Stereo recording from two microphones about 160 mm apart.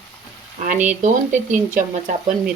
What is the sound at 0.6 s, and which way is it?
A woman's voice, 55° right (ahead or behind).